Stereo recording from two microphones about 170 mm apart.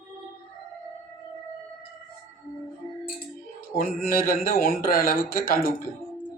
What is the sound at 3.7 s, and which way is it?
Speech, 60° left (ahead or behind).